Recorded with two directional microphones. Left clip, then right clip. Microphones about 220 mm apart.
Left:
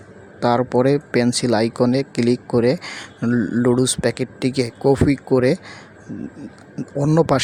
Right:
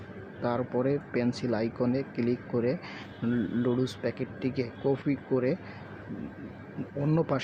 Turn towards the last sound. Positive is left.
turn(degrees=45)  # may be behind; listen again after turning